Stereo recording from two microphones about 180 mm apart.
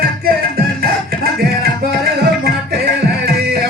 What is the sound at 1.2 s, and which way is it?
Music, 60° right (ahead or behind).